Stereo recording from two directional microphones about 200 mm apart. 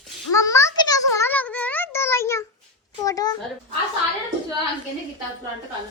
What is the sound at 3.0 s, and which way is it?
Speech, 20° left (ahead or behind).